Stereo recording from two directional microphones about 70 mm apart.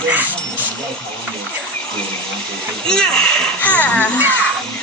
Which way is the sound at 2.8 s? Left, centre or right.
Centre.